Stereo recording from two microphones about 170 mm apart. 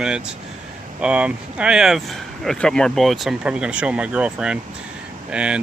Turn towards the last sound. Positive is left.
turn(degrees=-5)  # may be behind; listen again after turning